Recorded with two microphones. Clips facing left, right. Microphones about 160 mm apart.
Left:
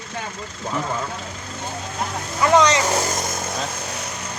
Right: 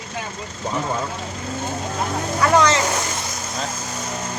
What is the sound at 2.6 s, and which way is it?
Speech, 15° left (ahead or behind).